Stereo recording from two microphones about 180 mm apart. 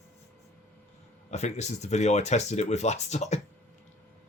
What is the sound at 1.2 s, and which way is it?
Speech, 40° left (ahead or behind).